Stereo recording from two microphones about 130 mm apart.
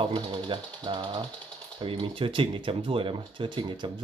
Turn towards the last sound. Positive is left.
turn(degrees=-40)  # may be behind; listen again after turning